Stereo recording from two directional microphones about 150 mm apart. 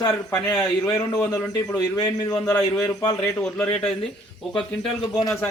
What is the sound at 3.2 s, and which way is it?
Speech, 10° left (ahead or behind).